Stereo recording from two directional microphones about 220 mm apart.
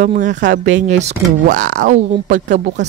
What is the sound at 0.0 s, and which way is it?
Speech, 35° right (ahead or behind).